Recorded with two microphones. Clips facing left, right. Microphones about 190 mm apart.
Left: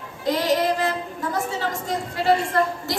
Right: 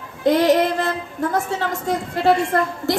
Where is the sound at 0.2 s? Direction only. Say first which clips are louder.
Right 6 dB; 55° right (ahead or behind).